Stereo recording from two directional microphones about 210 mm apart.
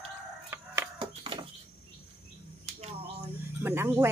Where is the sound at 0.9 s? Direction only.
25° right (ahead or behind).